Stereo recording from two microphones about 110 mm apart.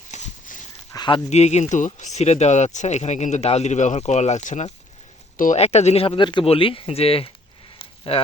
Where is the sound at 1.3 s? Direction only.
85° left.